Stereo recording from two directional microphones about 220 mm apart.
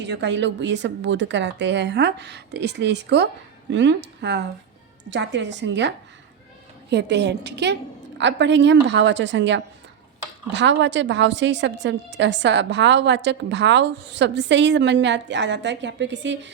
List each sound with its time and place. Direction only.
0.0 s a woman's voice: 50° right (ahead or behind)
6.9 s a woman's voice: 50° right (ahead or behind)